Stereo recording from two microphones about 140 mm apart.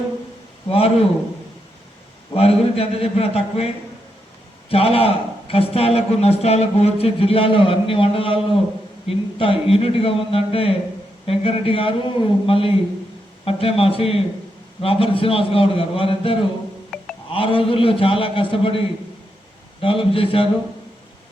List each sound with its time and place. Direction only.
0.7 s speech: 45° left (ahead or behind)
2.3 s speech: 45° left (ahead or behind)
4.7 s a man's voice: 45° left (ahead or behind)
19.8 s a man's voice: 40° left (ahead or behind)